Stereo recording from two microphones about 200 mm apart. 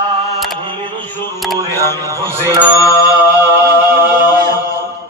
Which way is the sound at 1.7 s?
15° left (ahead or behind).